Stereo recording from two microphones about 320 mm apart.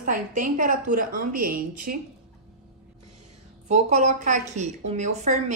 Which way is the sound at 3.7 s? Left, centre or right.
Right.